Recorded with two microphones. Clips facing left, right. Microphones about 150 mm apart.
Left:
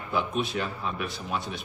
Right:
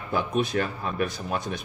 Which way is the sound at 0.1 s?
45° right (ahead or behind).